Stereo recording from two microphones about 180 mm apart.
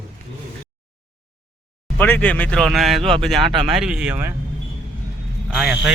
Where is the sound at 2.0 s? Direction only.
10° left (ahead or behind); by 4.3 s 10° right (ahead or behind).